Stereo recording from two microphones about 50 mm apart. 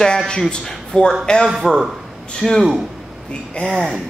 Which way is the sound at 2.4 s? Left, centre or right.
Centre.